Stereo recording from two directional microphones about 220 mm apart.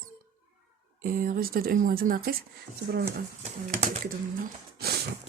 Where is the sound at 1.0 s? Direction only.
40° right (ahead or behind).